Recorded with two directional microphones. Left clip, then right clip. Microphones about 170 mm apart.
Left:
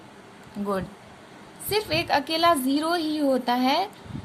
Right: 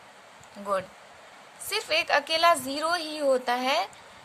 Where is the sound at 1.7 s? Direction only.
20° right (ahead or behind).